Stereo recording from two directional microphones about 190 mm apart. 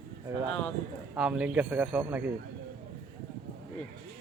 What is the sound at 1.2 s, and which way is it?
A man's voice, 5° right (ahead or behind).